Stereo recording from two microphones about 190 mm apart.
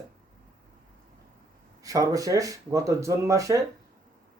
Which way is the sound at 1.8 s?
20° right (ahead or behind).